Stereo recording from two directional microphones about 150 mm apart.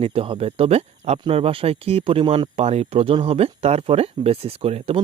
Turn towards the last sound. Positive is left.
turn(degrees=-40)  # may be behind; listen again after turning